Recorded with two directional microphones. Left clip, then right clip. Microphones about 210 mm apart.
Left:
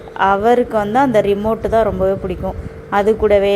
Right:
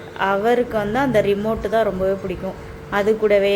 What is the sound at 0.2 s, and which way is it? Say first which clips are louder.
Speech: left 5 dB; 15° left (ahead or behind).